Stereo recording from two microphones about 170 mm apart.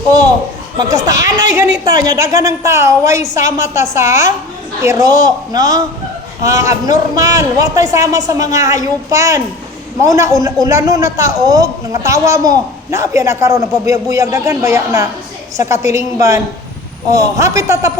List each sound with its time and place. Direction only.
1.0 s a man's voice: 20° right (ahead or behind)